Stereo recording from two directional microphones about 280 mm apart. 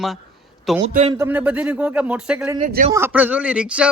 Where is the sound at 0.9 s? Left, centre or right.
Right.